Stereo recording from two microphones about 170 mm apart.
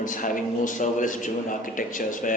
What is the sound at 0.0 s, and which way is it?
A man's voice, 50° left (ahead or behind).